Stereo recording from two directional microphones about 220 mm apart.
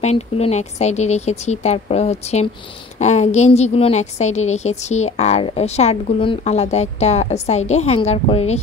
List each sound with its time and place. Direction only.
0.0 s a woman's voice: 30° left (ahead or behind)